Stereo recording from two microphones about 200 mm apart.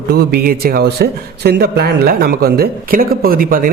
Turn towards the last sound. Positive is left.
turn(degrees=-45)  # may be behind; listen again after turning